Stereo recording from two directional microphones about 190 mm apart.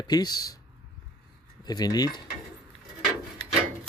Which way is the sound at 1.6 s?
20° left (ahead or behind).